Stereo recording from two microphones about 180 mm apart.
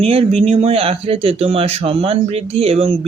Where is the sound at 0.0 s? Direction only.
35° right (ahead or behind).